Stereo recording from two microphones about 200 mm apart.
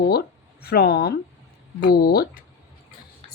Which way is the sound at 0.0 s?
50° left (ahead or behind).